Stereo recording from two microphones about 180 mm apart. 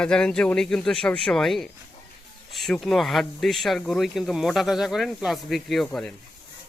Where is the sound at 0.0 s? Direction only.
5° left (ahead or behind).